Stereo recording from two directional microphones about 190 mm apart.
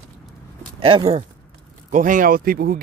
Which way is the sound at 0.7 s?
30° right (ahead or behind).